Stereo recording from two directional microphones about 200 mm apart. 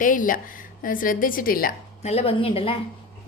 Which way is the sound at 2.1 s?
30° left (ahead or behind).